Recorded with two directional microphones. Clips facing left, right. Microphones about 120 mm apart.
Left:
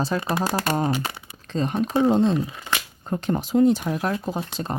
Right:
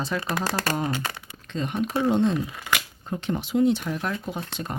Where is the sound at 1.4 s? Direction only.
35° left (ahead or behind).